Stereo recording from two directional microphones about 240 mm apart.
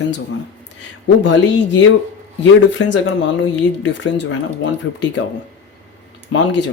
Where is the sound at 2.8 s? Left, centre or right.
Left.